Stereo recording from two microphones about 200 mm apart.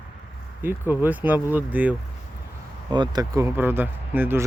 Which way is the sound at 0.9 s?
10° right (ahead or behind).